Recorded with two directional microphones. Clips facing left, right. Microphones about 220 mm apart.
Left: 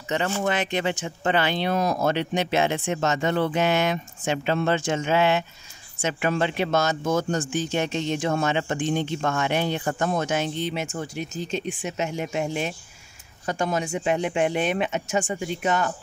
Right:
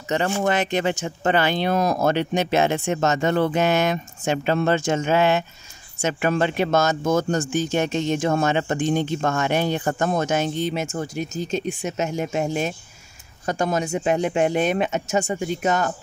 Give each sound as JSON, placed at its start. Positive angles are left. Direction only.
{"t": 0.4, "sound": "speech", "side_deg": -40}